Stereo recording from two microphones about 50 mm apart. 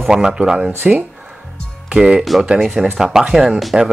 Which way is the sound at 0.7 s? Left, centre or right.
Right.